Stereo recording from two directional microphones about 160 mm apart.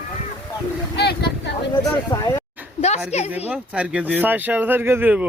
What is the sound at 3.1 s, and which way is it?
Speech, 45° left (ahead or behind).